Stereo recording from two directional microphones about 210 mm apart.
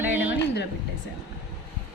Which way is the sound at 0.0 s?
10° right (ahead or behind).